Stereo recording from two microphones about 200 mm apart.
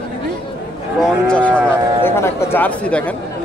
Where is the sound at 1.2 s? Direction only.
5° left (ahead or behind).